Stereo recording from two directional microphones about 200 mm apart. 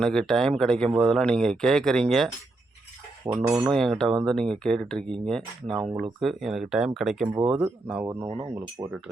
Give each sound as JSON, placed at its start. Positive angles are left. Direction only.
{"t": 0.0, "sound": "speech", "side_deg": 5}
{"t": 3.3, "sound": "speech", "side_deg": -15}
{"t": 3.7, "sound": "speech", "side_deg": 0}